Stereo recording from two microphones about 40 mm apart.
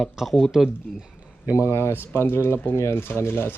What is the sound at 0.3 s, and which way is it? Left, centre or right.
Speech, centre.